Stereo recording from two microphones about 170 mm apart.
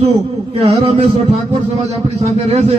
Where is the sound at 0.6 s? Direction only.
40° right (ahead or behind).